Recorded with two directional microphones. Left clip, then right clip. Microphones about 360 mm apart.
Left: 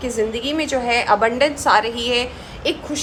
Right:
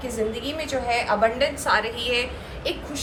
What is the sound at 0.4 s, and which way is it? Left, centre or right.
A woman's voice, centre.